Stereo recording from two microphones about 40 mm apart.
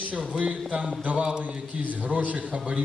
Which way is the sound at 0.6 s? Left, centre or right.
Right.